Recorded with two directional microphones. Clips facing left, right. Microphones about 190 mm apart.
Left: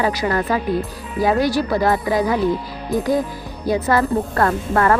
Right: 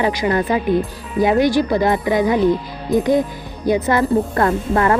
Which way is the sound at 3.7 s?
20° right (ahead or behind).